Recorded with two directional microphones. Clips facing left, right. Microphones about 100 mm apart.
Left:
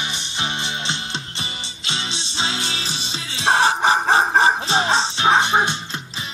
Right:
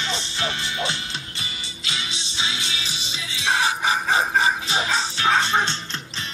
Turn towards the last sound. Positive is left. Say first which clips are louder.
# left 4 dB
turn(degrees=20)  # may be behind; listen again after turning